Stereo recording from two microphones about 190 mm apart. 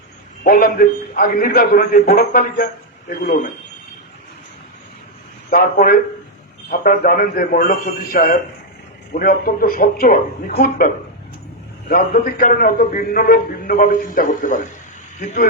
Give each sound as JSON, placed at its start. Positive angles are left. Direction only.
{"t": 0.4, "sound": "a man's voice", "side_deg": 50}
{"t": 5.5, "sound": "a man's voice", "side_deg": 50}